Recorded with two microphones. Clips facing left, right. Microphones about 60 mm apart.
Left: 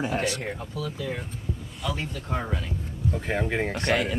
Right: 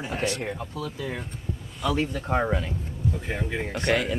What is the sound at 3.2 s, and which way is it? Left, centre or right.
Speech, left.